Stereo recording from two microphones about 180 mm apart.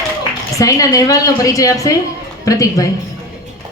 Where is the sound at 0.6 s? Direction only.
20° left (ahead or behind).